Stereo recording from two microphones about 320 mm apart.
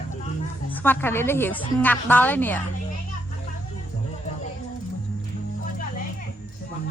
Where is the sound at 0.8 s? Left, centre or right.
Centre.